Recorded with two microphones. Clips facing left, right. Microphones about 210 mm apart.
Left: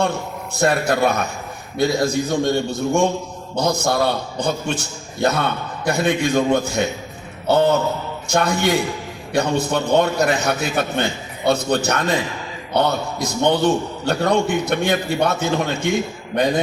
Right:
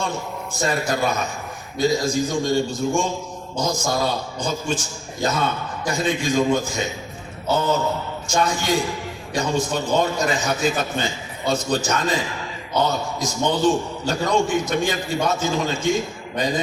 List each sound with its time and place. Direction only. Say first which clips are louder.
0.0 s a man's voice: left 5 dB; 60° left (ahead or behind)